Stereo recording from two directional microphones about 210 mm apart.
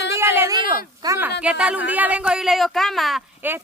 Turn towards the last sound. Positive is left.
turn(degrees=-5)  # may be behind; listen again after turning